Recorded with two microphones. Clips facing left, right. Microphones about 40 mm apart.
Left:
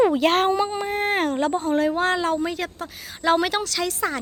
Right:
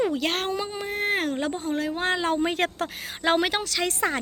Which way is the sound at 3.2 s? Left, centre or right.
Centre.